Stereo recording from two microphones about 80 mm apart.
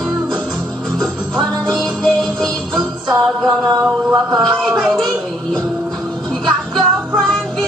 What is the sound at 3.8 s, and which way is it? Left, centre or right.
Mantra, right.